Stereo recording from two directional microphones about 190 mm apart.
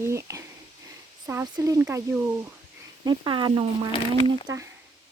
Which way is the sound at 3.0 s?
25° right (ahead or behind).